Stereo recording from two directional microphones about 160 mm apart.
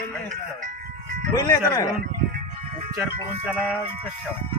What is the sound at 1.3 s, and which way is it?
Speech, 20° left (ahead or behind).